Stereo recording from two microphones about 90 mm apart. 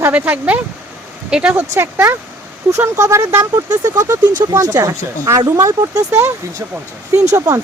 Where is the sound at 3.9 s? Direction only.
45° right (ahead or behind).